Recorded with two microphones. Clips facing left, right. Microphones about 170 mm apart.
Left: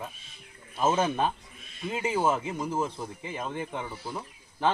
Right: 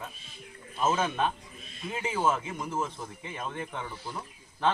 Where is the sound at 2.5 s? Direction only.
30° left (ahead or behind).